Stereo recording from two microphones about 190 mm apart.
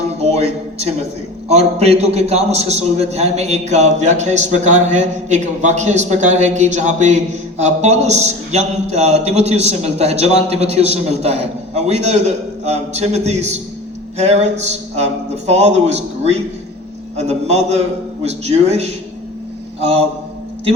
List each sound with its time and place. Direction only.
0.2 s a man's voice: 35° right (ahead or behind)